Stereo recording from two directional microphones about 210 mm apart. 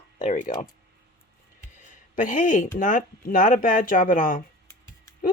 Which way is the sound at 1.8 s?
35° left (ahead or behind).